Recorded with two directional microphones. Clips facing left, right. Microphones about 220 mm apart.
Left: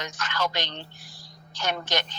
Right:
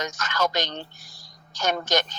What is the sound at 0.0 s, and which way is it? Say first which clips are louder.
Speech: right 4 dB; 45° right (ahead or behind).